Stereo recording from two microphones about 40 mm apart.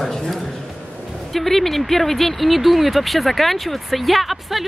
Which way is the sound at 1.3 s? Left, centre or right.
Centre.